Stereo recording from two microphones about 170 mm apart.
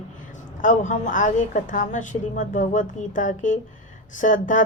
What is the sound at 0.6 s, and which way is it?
Speech, 50° left (ahead or behind).